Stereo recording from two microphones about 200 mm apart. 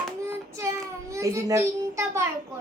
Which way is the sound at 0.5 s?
15° right (ahead or behind).